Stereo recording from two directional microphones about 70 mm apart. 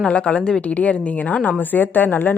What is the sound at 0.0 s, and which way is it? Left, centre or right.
A woman's voice, centre.